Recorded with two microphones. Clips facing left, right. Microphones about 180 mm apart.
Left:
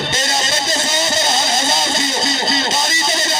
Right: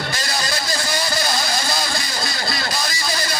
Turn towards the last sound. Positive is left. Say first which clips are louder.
# left 4 dB
turn(degrees=25)  # may be behind; listen again after turning